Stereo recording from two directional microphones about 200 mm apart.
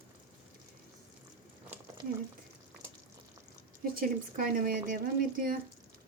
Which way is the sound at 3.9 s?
45° right (ahead or behind).